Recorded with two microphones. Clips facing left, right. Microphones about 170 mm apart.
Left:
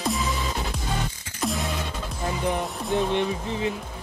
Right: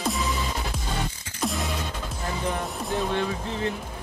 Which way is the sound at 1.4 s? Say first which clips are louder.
Left 1 dB; centre (ahead or behind).